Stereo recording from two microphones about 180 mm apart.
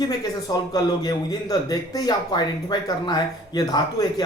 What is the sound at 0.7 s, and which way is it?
A man's voice, 20° left (ahead or behind).